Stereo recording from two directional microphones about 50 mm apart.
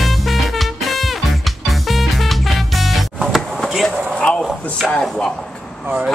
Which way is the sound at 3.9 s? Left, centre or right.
Right.